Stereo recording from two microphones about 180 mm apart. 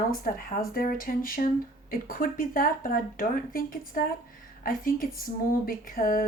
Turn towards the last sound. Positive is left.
turn(degrees=50)  # may be behind; listen again after turning